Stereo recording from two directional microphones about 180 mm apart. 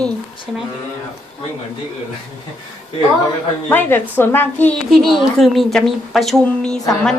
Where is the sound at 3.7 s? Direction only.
10° left (ahead or behind).